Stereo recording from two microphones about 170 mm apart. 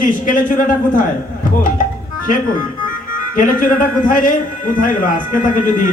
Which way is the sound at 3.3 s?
50° left (ahead or behind).